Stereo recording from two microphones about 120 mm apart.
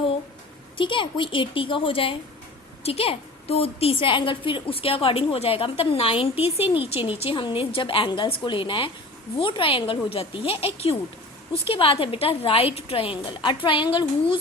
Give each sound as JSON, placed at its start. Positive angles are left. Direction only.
{"t": 0.8, "sound": "a woman's voice", "side_deg": 45}